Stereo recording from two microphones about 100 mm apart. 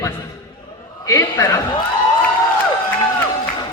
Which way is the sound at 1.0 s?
30° left (ahead or behind).